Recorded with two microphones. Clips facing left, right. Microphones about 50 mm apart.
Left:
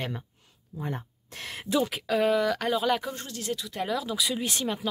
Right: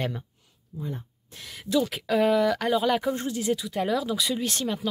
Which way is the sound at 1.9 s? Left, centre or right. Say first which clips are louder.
Right 2 dB; centre.